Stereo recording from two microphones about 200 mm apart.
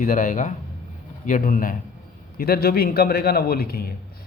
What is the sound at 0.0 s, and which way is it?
A man's voice, 40° left (ahead or behind).